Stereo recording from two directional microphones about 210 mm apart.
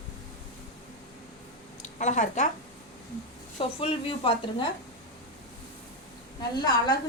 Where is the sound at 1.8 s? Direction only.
35° left (ahead or behind).